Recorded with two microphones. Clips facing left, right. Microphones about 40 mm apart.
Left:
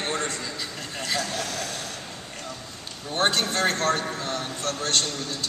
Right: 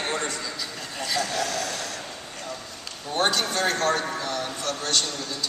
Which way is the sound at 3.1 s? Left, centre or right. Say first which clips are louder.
Even; left.